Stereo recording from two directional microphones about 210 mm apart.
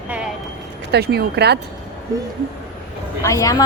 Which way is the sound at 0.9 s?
50° right (ahead or behind).